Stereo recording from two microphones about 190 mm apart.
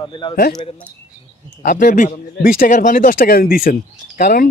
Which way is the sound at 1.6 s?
45° left (ahead or behind).